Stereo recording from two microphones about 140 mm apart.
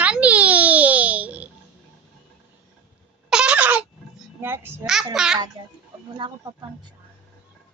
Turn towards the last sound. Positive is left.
turn(degrees=-30)  # may be behind; listen again after turning